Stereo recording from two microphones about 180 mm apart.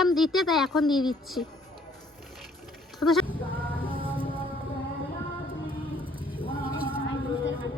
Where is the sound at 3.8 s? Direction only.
30° right (ahead or behind).